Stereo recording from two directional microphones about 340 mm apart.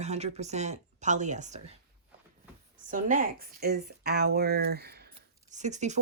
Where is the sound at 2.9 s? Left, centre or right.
Right.